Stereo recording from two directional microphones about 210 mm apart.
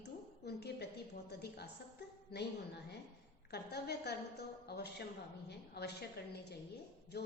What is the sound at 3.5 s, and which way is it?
A woman's voice, 50° left (ahead or behind).